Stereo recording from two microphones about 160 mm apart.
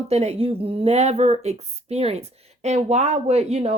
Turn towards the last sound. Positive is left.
turn(degrees=-40)  # may be behind; listen again after turning